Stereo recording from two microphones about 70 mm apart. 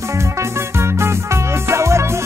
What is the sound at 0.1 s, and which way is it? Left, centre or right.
Music, right.